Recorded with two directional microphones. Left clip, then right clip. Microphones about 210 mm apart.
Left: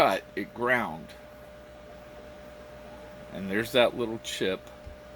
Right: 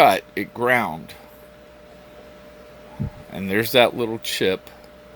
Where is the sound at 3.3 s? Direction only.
45° right (ahead or behind).